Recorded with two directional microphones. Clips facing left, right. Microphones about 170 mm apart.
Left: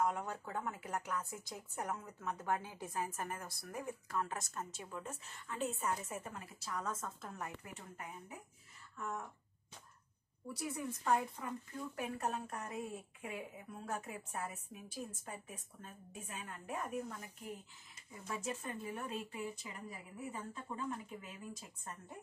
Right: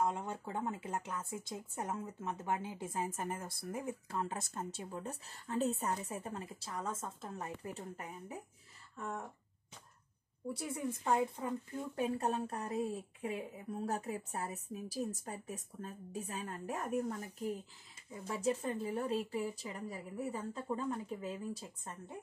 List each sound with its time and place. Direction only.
0.0 s speech: 25° right (ahead or behind)
10.5 s speech: 25° right (ahead or behind)